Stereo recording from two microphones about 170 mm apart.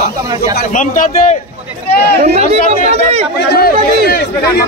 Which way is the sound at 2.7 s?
40° right (ahead or behind).